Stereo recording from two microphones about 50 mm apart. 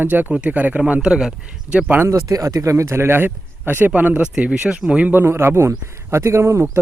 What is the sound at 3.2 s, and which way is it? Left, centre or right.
Speech, right.